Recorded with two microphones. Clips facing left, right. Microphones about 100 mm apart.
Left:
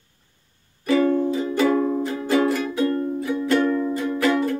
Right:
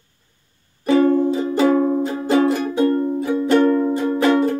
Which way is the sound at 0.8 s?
35° right (ahead or behind).